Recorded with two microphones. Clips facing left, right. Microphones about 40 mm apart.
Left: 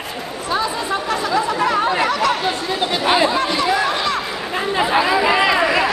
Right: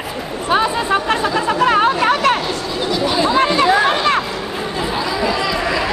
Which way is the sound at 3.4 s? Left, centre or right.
Right.